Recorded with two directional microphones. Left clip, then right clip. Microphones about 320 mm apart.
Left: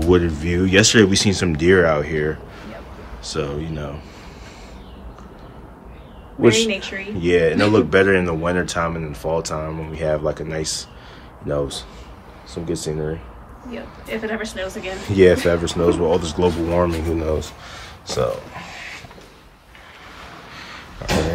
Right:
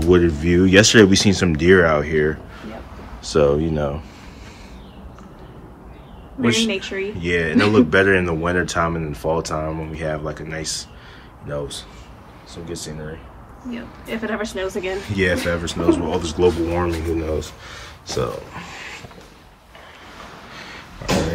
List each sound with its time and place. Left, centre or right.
0.1 s speech: centre
6.4 s speech: centre
6.7 s speech: centre
7.2 s speech: centre
13.7 s speech: centre
15.0 s speech: centre
20.5 s a sound: centre